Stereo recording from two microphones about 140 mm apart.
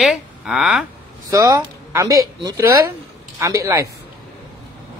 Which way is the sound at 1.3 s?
25° right (ahead or behind).